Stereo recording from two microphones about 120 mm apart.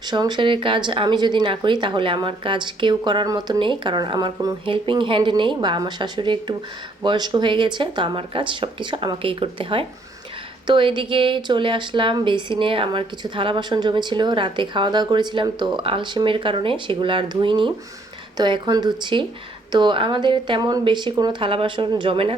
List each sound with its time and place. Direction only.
0.1 s speech: 35° right (ahead or behind)